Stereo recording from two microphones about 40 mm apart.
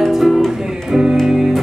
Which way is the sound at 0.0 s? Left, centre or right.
Centre.